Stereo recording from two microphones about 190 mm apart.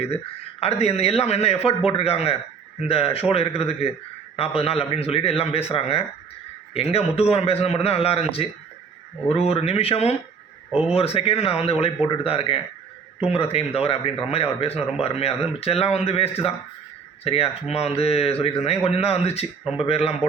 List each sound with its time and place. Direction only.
0.6 s speech: 35° left (ahead or behind)
10.7 s speech: 5° right (ahead or behind)
10.9 s speech: 30° left (ahead or behind)